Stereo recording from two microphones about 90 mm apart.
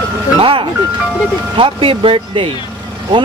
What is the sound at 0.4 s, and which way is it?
Speech, 80° right.